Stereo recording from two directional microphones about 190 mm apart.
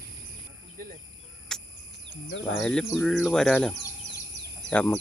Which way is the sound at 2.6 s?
5° left (ahead or behind).